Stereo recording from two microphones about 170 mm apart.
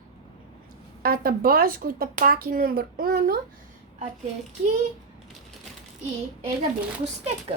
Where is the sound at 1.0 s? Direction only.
60° right (ahead or behind).